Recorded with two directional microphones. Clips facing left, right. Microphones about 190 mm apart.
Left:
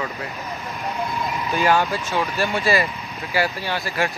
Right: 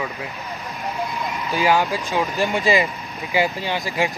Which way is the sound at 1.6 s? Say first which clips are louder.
Right 1 dB; 15° right (ahead or behind).